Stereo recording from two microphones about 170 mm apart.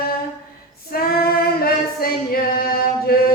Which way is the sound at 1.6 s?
60° left (ahead or behind).